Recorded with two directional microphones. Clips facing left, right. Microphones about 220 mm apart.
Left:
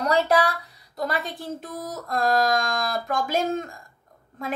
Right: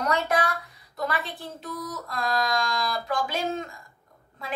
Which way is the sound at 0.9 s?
40° left (ahead or behind).